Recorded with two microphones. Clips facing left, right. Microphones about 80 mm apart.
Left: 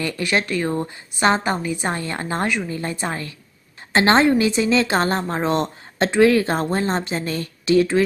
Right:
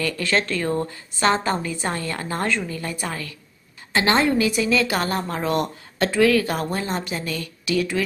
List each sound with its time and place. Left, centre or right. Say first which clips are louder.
0.0 s a woman's voice: left 1 dB; centre